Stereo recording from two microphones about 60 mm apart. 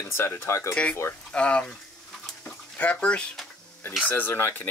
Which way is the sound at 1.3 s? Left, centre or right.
Centre.